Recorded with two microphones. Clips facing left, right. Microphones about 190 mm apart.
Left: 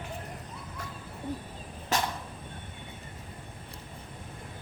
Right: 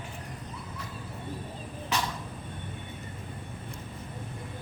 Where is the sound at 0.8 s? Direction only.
50° left (ahead or behind).